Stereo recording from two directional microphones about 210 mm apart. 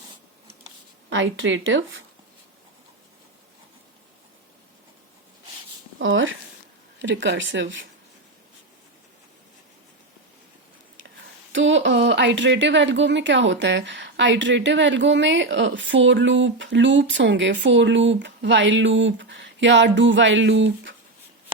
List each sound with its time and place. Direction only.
1.1 s speech: 65° right (ahead or behind)
6.0 s a sound: 65° right (ahead or behind)
7.0 s speech: 60° right (ahead or behind)
11.5 s speech: 60° right (ahead or behind)